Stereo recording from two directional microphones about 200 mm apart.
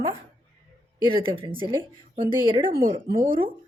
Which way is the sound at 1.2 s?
25° right (ahead or behind).